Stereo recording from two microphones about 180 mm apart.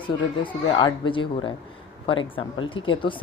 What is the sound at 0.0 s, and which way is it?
Speech, 25° left (ahead or behind).